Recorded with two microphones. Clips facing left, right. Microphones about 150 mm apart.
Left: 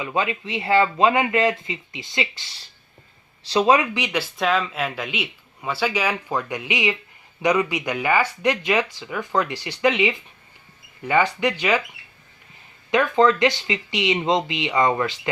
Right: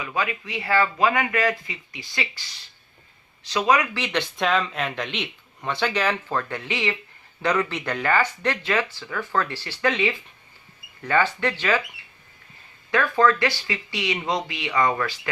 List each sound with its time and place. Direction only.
0.0 s speech: 25° left (ahead or behind)
3.9 s speech: 10° left (ahead or behind)
12.9 s speech: 20° left (ahead or behind)